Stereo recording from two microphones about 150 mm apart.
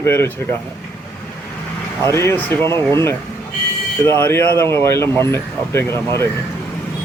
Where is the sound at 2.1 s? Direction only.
15° left (ahead or behind).